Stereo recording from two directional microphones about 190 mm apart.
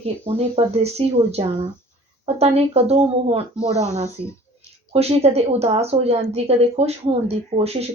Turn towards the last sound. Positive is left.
turn(degrees=-35)  # may be behind; listen again after turning